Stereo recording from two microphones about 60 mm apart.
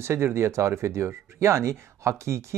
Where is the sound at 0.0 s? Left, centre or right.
Right.